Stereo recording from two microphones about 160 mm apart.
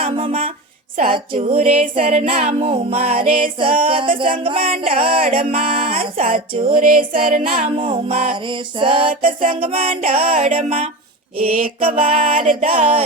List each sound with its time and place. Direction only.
0.0 s speech: 35° right (ahead or behind)
1.1 s music: 35° right (ahead or behind)
6.1 s music: 60° right (ahead or behind)
7.8 s music: 35° right (ahead or behind)